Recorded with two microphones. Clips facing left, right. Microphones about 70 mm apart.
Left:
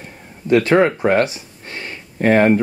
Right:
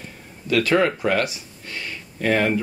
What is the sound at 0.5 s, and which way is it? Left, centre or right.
Speech, left.